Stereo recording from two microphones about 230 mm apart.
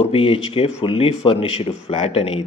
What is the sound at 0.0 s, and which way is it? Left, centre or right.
Speech, left.